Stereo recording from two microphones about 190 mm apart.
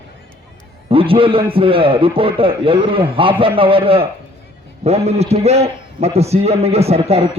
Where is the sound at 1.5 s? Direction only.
30° right (ahead or behind).